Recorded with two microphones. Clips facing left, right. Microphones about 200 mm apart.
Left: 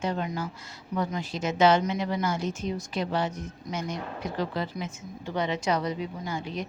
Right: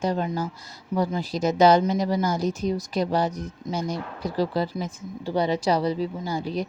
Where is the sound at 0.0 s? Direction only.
35° right (ahead or behind).